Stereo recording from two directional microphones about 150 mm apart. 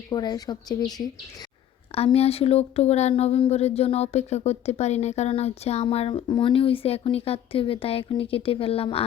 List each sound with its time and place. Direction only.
0.1 s speech: 25° left (ahead or behind)
2.0 s speech: 40° left (ahead or behind)